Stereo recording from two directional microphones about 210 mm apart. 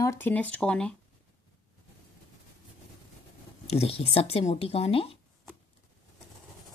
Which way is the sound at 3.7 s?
30° left (ahead or behind).